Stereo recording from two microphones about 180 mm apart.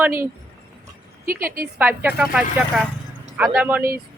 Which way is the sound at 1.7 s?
10° right (ahead or behind).